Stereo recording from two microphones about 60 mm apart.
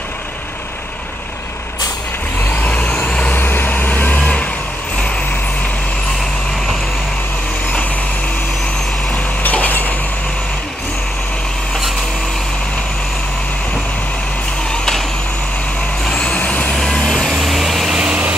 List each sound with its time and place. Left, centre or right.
2.4 s vehicle: left
3.3 s vehicle: left
4.2 s vehicle: centre
9.1 s cutlery: left
14.7 s a sound: centre
16.1 s vehicle: centre
16.7 s vehicle: centre
17.3 s vehicle: centre
17.9 s vehicle: centre